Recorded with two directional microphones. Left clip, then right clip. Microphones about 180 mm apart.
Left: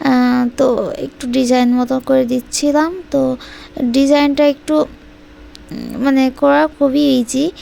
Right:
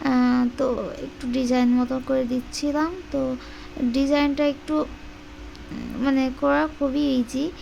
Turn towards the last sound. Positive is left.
turn(degrees=40)  # may be behind; listen again after turning